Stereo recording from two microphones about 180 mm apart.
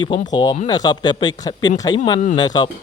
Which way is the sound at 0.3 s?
25° left (ahead or behind).